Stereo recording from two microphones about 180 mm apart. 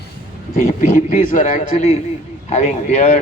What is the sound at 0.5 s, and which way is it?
A man's voice, 40° left (ahead or behind).